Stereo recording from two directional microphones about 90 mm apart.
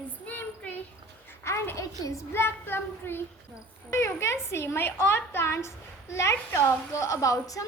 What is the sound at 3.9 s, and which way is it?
A woman's voice, 35° left (ahead or behind).